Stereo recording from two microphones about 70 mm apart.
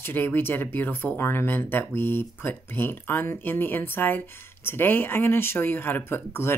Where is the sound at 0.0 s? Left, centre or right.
Left.